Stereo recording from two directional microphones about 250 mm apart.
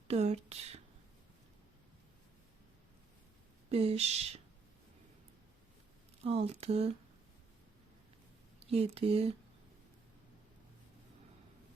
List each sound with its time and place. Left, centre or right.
0.1 s speech: right
3.7 s speech: right
6.2 s speech: right
8.7 s speech: right